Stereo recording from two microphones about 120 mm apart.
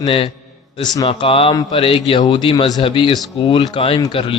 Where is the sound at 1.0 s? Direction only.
50° left (ahead or behind).